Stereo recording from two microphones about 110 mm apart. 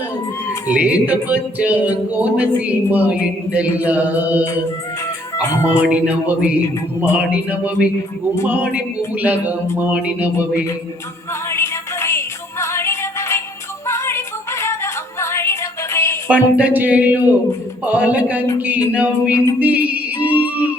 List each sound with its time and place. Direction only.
0.7 s music: 10° right (ahead or behind)
5.8 s music: 10° right (ahead or behind)
11.4 s music: 25° left (ahead or behind)
16.3 s music: 15° right (ahead or behind)